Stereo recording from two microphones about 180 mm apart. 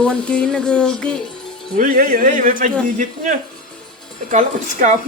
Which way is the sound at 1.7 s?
50° right (ahead or behind).